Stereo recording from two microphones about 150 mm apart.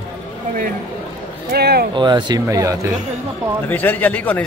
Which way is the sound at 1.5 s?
90° right.